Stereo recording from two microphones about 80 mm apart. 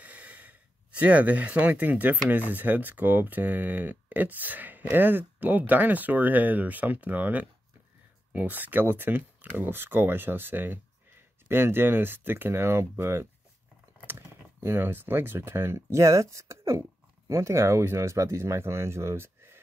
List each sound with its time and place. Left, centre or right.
0.0 s gasp: centre
2.2 s speech: right